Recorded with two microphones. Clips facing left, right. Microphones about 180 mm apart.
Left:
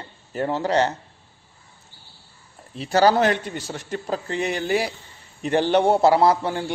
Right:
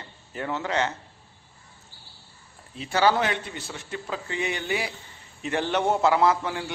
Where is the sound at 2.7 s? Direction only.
40° left (ahead or behind).